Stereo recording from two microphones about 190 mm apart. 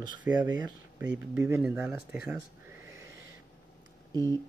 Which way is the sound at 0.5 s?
20° right (ahead or behind).